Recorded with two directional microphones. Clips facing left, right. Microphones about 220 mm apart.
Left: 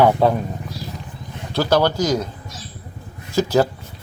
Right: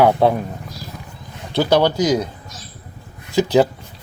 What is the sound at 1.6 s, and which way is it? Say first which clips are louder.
Speech: right 2 dB; 15° right (ahead or behind).